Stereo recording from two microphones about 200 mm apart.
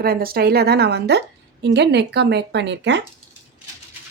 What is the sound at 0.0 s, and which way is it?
A woman's voice, 50° right (ahead or behind).